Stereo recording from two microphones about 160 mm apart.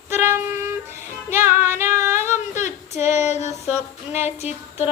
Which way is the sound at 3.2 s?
45° left (ahead or behind).